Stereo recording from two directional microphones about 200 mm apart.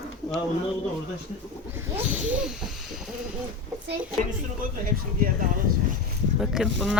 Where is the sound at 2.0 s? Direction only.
10° right (ahead or behind).